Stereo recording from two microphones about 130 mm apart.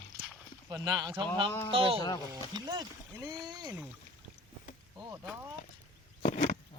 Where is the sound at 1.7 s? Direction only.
45° right (ahead or behind).